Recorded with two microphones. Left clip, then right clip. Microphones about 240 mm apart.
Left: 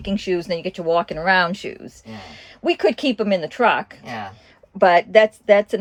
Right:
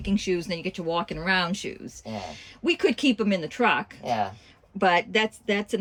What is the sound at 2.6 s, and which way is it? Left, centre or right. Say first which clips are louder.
Speech: left 5 dB; centre.